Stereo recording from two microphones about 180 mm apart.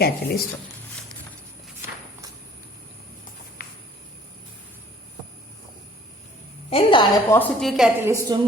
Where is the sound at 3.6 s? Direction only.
55° left (ahead or behind).